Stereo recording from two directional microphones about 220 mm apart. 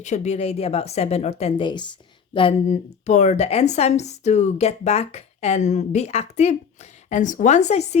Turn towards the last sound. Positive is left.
turn(degrees=30)  # may be behind; listen again after turning